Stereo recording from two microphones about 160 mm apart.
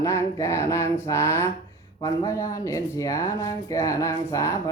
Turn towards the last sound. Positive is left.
turn(degrees=20)  # may be behind; listen again after turning